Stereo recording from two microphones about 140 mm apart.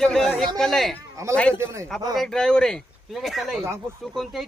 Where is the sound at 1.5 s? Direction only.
20° right (ahead or behind).